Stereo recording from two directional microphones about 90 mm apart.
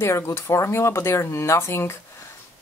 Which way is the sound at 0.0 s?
30° left (ahead or behind).